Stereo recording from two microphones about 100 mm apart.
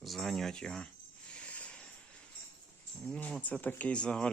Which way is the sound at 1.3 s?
10° left (ahead or behind).